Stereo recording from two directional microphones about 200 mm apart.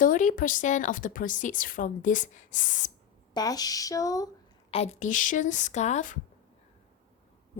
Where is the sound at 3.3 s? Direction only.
20° left (ahead or behind).